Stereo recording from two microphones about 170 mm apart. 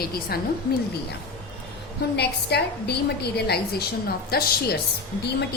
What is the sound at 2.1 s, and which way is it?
A woman's voice, 75° left (ahead or behind).